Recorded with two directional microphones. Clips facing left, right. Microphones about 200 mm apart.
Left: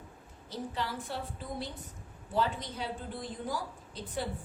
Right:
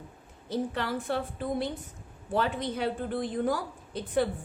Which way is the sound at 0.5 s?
60° right (ahead or behind).